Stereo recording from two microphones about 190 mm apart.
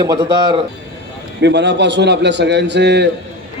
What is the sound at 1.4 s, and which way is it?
A man's voice, 65° right (ahead or behind).